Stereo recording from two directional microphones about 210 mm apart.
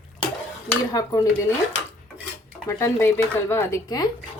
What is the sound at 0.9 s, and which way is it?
Speech, 15° left (ahead or behind).